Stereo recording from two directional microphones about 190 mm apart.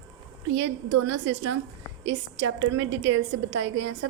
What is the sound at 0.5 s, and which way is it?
A woman's voice, 75° right (ahead or behind).